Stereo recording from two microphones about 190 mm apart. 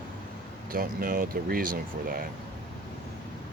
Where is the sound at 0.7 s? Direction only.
50° right (ahead or behind).